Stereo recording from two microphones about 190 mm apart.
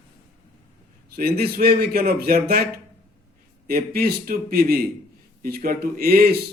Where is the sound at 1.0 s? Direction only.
55° right (ahead or behind).